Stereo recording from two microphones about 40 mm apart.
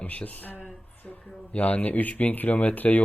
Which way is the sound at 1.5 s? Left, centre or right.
Left.